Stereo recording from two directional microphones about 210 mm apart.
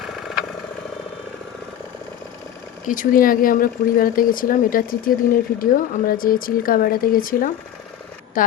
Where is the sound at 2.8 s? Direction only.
40° left (ahead or behind).